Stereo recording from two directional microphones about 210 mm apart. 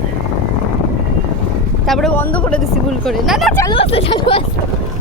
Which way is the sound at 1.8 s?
Centre (ahead or behind).